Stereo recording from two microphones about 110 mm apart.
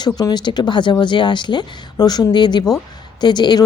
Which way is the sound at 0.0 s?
40° left (ahead or behind).